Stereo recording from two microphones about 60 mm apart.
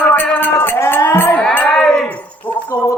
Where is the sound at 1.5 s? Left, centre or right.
Left.